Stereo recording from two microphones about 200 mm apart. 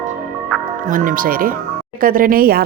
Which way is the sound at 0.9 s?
40° right (ahead or behind).